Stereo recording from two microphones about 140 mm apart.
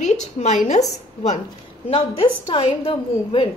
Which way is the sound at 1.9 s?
45° left (ahead or behind).